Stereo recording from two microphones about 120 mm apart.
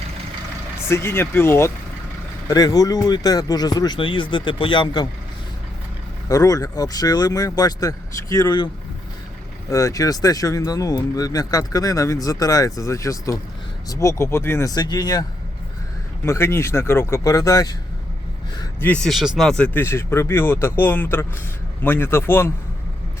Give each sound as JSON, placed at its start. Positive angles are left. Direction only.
{"t": 0.8, "sound": "speech", "side_deg": 20}
{"t": 2.5, "sound": "speech", "side_deg": 30}
{"t": 6.2, "sound": "speech", "side_deg": 30}
{"t": 9.6, "sound": "speech", "side_deg": 25}
{"t": 14.7, "sound": "speech", "side_deg": 35}
{"t": 16.2, "sound": "speech", "side_deg": 20}
{"t": 19.0, "sound": "speech", "side_deg": 0}